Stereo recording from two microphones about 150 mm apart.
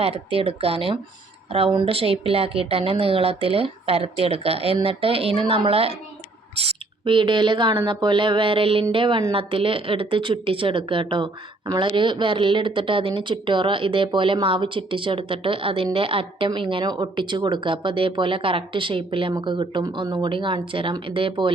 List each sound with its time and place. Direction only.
0.0 s a woman's voice: 40° right (ahead or behind)